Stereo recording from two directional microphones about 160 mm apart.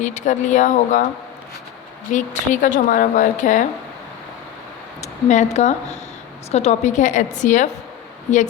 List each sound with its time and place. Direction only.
0.0 s a woman's voice: 50° left (ahead or behind)
2.1 s a woman's voice: 50° left (ahead or behind)
4.9 s a woman's voice: 45° left (ahead or behind)